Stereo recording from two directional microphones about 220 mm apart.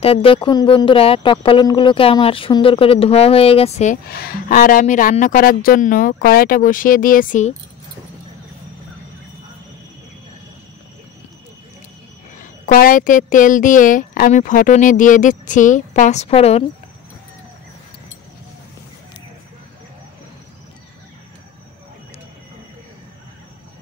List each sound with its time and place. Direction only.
0.0 s speech: 25° left (ahead or behind)
12.4 s speech: 40° left (ahead or behind)